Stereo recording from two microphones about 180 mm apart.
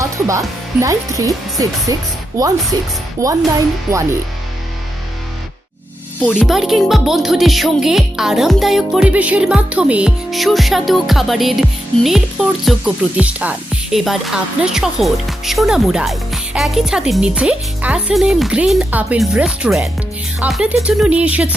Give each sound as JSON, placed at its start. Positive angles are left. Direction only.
{"t": 0.0, "sound": "speech", "side_deg": -15}
{"t": 3.2, "sound": "speech", "side_deg": -15}
{"t": 6.1, "sound": "speech", "side_deg": 5}